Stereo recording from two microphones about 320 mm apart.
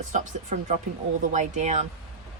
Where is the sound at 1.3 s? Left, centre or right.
Right.